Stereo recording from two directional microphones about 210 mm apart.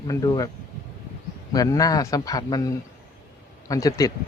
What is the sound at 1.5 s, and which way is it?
A man's voice, 15° left (ahead or behind).